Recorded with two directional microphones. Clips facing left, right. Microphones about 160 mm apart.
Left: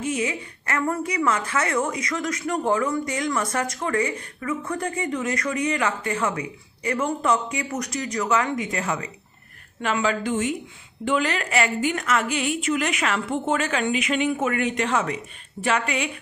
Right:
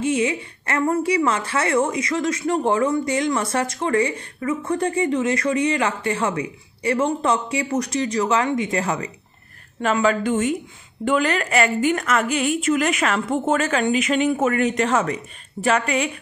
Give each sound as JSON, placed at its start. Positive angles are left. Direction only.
{"t": 0.0, "sound": "a woman's voice", "side_deg": -25}